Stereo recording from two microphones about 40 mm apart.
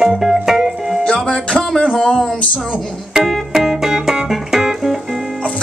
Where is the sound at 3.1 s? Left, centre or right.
Centre.